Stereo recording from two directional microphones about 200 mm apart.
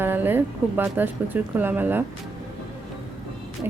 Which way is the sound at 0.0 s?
10° right (ahead or behind).